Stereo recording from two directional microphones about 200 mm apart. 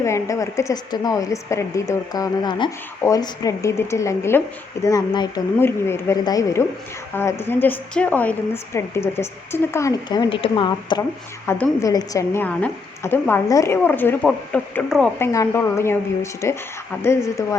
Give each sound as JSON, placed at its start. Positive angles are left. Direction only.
{"t": 0.0, "sound": "a woman's voice", "side_deg": 15}
{"t": 11.4, "sound": "a woman's voice", "side_deg": 10}
{"t": 15.2, "sound": "a woman's voice", "side_deg": 15}